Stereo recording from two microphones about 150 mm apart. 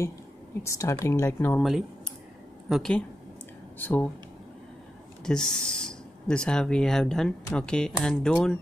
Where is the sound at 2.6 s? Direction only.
Centre (ahead or behind).